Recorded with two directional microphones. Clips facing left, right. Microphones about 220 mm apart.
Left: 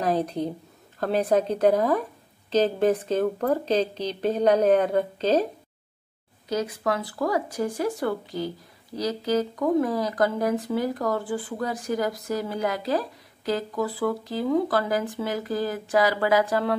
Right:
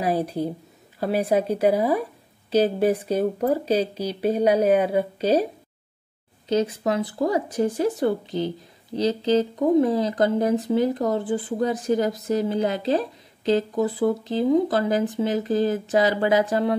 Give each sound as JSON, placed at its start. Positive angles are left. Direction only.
{"t": 0.0, "sound": "speech", "side_deg": -10}
{"t": 6.5, "sound": "speech", "side_deg": -20}